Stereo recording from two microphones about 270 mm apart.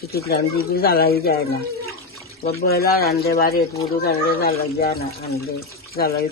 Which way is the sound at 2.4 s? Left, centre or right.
Left.